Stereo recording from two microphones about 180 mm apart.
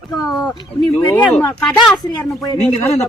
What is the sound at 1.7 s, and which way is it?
Speech, 25° left (ahead or behind).